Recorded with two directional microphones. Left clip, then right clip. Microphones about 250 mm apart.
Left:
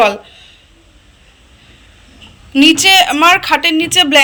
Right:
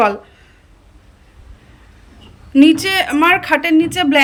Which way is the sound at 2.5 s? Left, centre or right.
Centre.